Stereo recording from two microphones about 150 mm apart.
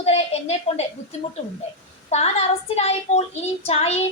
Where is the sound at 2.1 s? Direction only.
45° left (ahead or behind).